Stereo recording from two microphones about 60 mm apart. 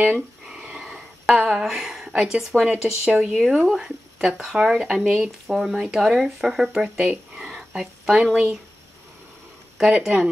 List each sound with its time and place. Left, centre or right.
0.0 s a sound: centre
1.6 s a woman's voice: centre
3.4 s speech: centre
9.8 s speech: centre